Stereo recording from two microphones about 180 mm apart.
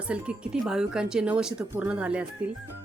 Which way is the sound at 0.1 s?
5° right (ahead or behind).